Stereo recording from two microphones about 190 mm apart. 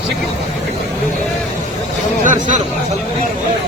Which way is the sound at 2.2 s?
40° right (ahead or behind).